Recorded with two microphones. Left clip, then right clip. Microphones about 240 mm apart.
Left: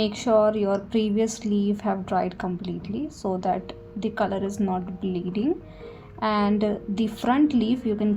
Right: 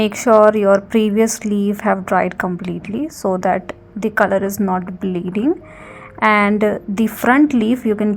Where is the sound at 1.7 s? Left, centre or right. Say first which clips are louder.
Right 12 dB; right.